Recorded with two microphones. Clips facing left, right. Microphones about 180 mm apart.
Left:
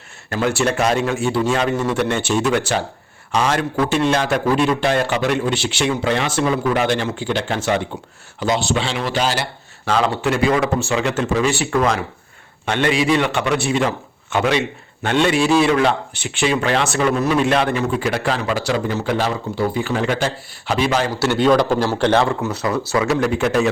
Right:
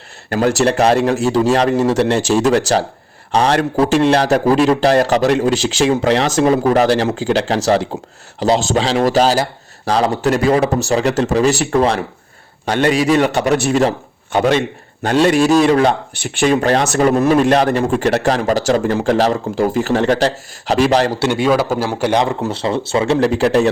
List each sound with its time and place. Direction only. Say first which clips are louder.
0.3 s a man's voice: right 5 dB; 40° right (ahead or behind)
5.5 s speech: right 5 dB; 90° right
5.8 s a man's voice: right 6 dB; 35° right (ahead or behind)
21.3 s a man's voice: left 3 dB; 5° right (ahead or behind)
22.4 s speech: right 2 dB; 30° right (ahead or behind)